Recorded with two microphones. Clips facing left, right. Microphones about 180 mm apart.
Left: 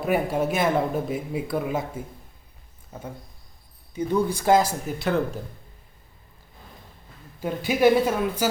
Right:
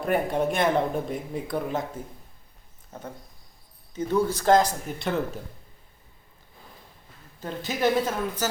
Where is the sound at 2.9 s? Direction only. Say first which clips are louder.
Left 2 dB; 10° left (ahead or behind).